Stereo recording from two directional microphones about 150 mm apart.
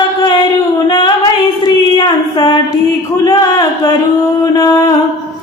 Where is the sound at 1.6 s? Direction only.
30° left (ahead or behind).